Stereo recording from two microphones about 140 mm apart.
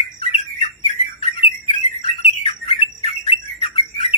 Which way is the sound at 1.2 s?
45° left (ahead or behind).